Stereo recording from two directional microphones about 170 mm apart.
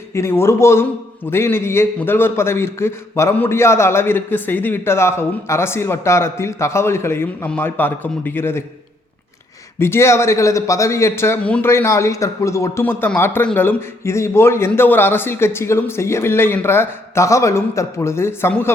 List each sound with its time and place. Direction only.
0.1 s a man's voice: 15° left (ahead or behind)
9.7 s a man's voice: 15° left (ahead or behind)